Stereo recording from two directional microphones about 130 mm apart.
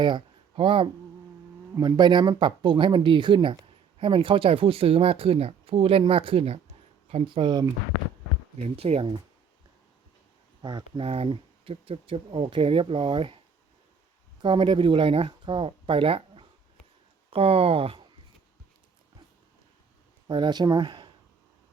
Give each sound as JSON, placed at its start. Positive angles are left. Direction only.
{"t": 0.0, "sound": "speech", "side_deg": -40}
{"t": 1.7, "sound": "speech", "side_deg": -30}
{"t": 8.5, "sound": "speech", "side_deg": -55}
{"t": 10.6, "sound": "speech", "side_deg": -35}
{"t": 14.4, "sound": "speech", "side_deg": -40}
{"t": 20.2, "sound": "speech", "side_deg": -35}